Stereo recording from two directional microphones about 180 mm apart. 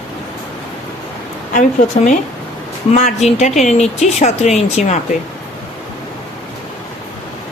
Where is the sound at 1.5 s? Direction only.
45° left (ahead or behind).